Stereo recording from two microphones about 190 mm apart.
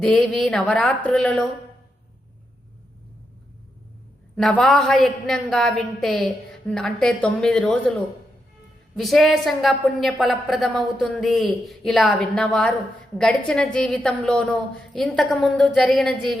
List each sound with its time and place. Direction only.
0.0 s a woman's voice: centre (ahead or behind)
4.4 s a woman's voice: 5° left (ahead or behind)
9.0 s a woman's voice: centre (ahead or behind)